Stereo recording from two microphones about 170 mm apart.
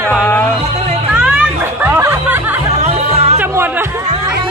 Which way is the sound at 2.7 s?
40° right (ahead or behind).